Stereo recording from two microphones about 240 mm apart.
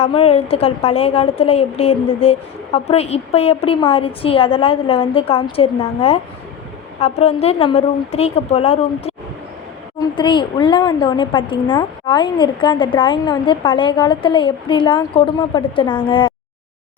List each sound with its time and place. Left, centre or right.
0.0 s speech: left